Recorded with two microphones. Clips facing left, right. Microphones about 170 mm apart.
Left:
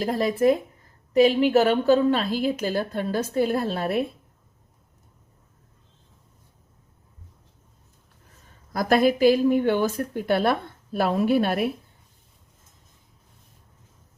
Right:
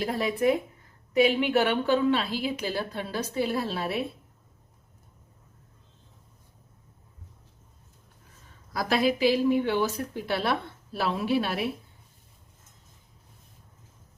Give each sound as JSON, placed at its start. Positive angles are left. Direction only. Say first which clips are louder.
{"t": 0.0, "sound": "a woman's voice", "louder": "left 4 dB", "side_deg": 40}
{"t": 8.7, "sound": "a woman's voice", "louder": "left 5 dB", "side_deg": 50}